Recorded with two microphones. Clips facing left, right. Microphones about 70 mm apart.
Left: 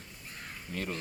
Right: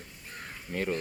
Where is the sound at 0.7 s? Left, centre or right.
Right.